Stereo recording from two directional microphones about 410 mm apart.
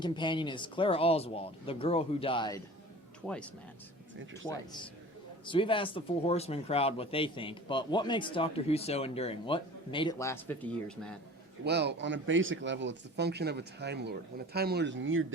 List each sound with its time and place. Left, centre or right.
0.0 s speech: centre
11.6 s speech: right